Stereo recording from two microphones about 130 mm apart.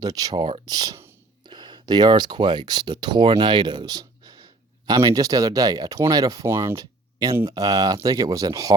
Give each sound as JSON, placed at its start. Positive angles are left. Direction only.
{"t": 0.0, "sound": "speech", "side_deg": -30}